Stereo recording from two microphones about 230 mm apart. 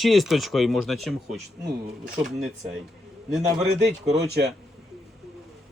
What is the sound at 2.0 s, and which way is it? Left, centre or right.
Speech, centre.